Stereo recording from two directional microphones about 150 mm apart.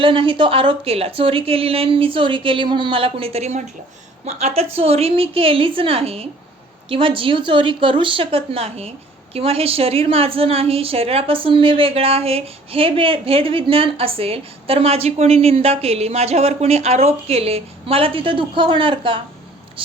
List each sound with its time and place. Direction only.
0.0 s a woman's voice: 35° right (ahead or behind)